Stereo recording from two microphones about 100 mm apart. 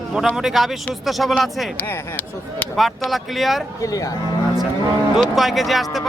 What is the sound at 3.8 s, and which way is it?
Speech, 35° left (ahead or behind).